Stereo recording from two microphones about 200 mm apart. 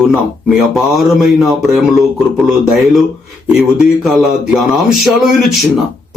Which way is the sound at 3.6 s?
Centre (ahead or behind).